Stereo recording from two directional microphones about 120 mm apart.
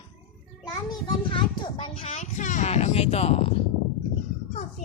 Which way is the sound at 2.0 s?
85° left.